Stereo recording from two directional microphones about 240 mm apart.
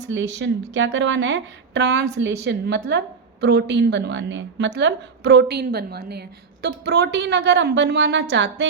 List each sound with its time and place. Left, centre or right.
0.0 s a woman's voice: right